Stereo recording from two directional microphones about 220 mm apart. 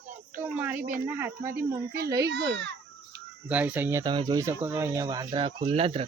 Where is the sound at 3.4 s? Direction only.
5° right (ahead or behind); by 6.0 s 25° right (ahead or behind).